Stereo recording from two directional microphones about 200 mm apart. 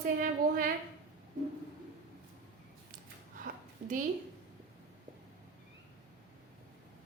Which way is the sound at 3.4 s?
40° right (ahead or behind).